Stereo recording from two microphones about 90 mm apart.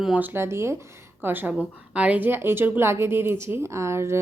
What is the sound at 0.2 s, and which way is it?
A woman's voice, 30° right (ahead or behind).